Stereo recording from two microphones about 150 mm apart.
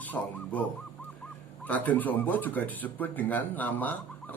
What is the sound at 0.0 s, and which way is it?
Speech, 10° left (ahead or behind).